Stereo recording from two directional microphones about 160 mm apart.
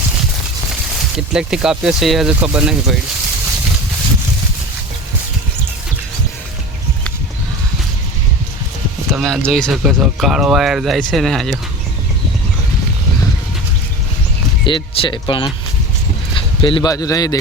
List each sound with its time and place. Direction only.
1.3 s speech: 5° right (ahead or behind)
9.1 s speech: centre (ahead or behind)
14.6 s speech: 30° left (ahead or behind)